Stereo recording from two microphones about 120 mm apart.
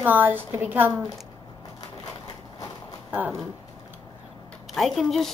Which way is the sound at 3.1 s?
15° right (ahead or behind).